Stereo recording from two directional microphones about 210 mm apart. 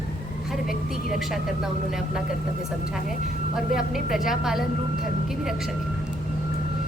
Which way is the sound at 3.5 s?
Centre (ahead or behind).